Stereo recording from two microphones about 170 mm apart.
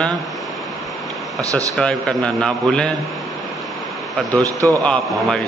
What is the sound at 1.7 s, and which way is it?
A man's voice, 5° left (ahead or behind).